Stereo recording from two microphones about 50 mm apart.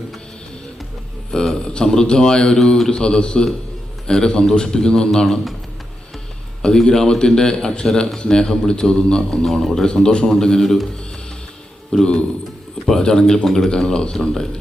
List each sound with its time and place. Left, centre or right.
1.3 s a man's voice: centre
6.6 s a man's voice: centre
9.4 s a man's voice: centre
11.9 s a man's voice: centre